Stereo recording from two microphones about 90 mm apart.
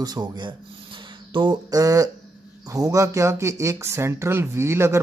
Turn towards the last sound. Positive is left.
turn(degrees=-30)  # may be behind; listen again after turning